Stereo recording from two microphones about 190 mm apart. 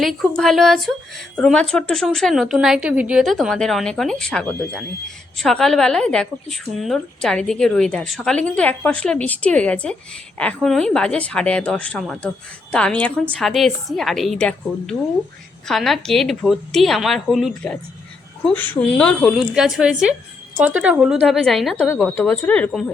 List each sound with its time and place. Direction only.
0.0 s a woman's voice: centre (ahead or behind)